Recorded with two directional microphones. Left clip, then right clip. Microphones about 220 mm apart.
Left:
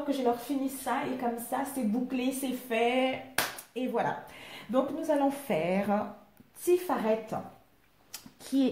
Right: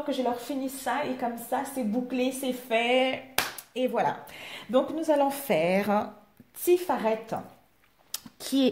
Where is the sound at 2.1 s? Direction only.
45° right (ahead or behind).